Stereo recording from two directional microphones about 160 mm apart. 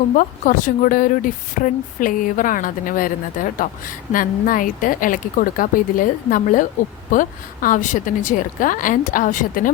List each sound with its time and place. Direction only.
0.1 s speech: 55° left (ahead or behind)